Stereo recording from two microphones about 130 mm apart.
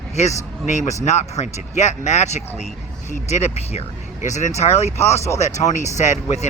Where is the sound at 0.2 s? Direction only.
60° left (ahead or behind).